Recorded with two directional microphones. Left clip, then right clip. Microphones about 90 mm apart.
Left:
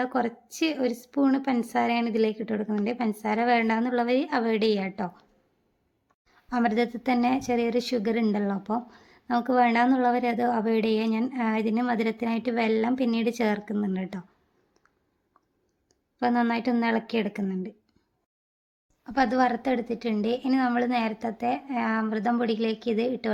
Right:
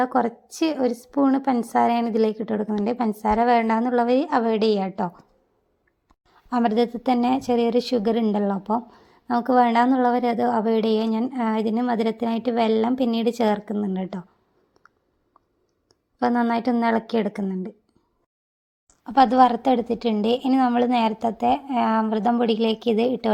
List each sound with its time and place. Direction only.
0.0 s a woman's voice: 30° right (ahead or behind)
6.2 s a woman's voice: 30° right (ahead or behind)
16.1 s a woman's voice: 25° right (ahead or behind)
19.0 s a woman's voice: 45° right (ahead or behind)
20.5 s a woman's voice: 30° right (ahead or behind)
20.8 s a woman's voice: 40° right (ahead or behind)